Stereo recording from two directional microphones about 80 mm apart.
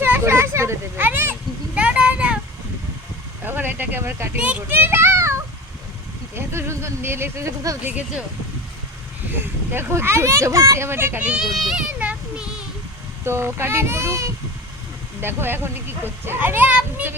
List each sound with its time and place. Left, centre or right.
0.0 s a sound: right
3.4 s a sound: right
4.4 s a child's voice: centre; by 7.8 s right
9.3 s speech: right
11.2 s a child's voice: centre
11.4 s a child's voice: centre
11.9 s child singing: centre
13.2 s speech: right
15.2 s a child's voice: right